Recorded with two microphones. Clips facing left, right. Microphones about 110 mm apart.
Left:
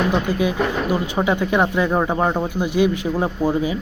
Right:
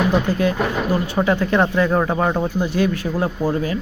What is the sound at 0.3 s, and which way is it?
Speech, 10° left (ahead or behind).